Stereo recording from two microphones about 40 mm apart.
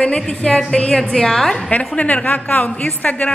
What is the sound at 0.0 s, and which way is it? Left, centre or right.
Speech, left.